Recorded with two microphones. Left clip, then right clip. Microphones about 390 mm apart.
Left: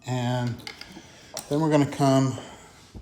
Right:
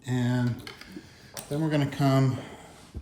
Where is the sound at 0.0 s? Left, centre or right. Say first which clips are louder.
Left 1 dB; centre.